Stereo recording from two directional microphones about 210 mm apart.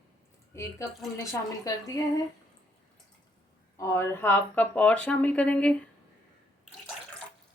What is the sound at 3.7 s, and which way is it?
Speech, 15° left (ahead or behind).